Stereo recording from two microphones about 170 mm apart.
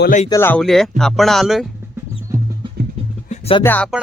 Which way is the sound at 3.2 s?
40° left (ahead or behind).